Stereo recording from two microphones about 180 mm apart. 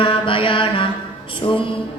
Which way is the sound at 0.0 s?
30° left (ahead or behind).